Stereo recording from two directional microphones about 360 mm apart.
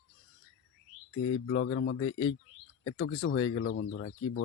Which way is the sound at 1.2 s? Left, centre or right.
Left.